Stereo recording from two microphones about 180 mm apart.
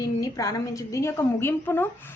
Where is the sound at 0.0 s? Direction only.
20° left (ahead or behind).